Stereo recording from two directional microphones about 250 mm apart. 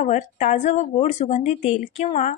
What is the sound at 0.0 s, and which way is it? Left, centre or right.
Speech, left.